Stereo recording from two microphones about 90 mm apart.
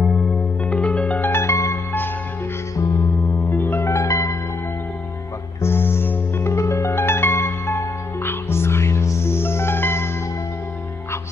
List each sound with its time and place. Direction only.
0.7 s music: 15° left (ahead or behind)
1.3 s music: 30° left (ahead or behind)
3.4 s music: 20° left (ahead or behind)
5.6 s music: 25° left (ahead or behind)